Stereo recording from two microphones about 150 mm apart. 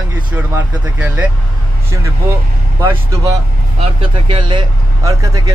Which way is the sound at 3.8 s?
35° right (ahead or behind).